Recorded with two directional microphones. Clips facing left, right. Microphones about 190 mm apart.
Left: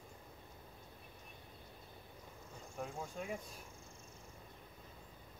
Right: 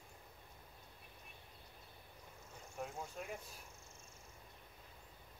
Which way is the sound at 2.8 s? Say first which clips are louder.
Left 2 dB; 5° right (ahead or behind).